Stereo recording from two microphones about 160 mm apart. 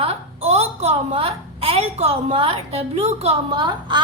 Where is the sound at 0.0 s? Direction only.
40° right (ahead or behind).